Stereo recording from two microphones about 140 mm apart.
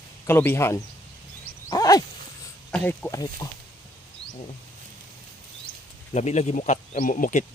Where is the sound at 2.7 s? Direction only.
10° left (ahead or behind).